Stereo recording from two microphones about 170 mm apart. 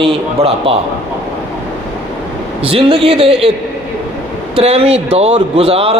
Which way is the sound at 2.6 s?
35° right (ahead or behind).